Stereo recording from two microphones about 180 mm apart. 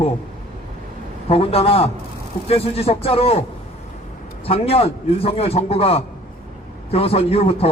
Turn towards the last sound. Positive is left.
turn(degrees=35)  # may be behind; listen again after turning